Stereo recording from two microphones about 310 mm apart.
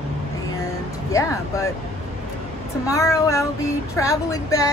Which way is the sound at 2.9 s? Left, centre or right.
Centre.